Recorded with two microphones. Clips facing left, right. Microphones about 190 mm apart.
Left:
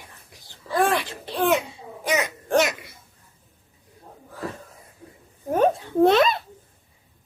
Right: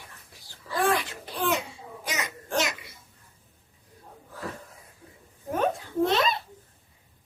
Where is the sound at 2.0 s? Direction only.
60° left (ahead or behind).